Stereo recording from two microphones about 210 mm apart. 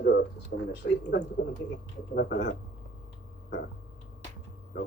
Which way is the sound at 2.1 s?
45° left (ahead or behind).